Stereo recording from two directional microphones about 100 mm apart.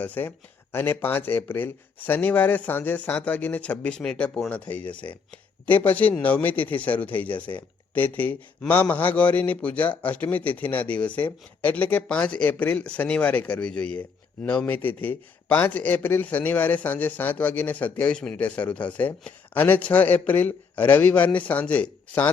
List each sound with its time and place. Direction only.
0.0 s speech: 20° left (ahead or behind)